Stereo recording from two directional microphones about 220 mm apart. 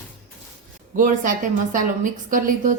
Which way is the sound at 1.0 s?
35° right (ahead or behind).